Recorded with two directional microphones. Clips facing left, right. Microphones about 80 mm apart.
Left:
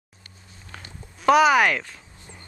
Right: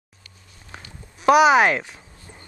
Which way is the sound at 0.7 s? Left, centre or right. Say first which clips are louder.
Right 1 dB; centre.